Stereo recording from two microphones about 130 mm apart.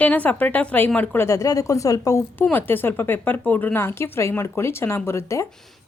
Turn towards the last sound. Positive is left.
turn(degrees=20)  # may be behind; listen again after turning